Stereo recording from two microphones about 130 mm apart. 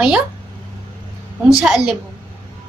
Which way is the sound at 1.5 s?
5° right (ahead or behind).